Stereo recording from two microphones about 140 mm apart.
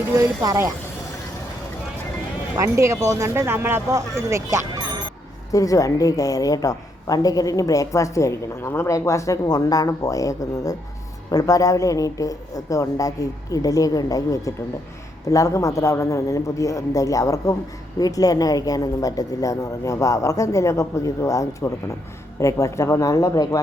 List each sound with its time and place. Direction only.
0.2 s speech: 20° right (ahead or behind)
2.6 s speech: 20° right (ahead or behind)
5.5 s a woman's voice: 25° left (ahead or behind)